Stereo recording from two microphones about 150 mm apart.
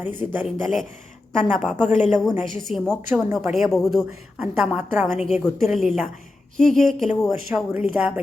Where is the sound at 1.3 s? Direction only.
5° left (ahead or behind).